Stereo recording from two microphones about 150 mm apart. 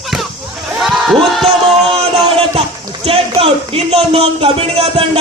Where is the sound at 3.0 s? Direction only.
40° right (ahead or behind).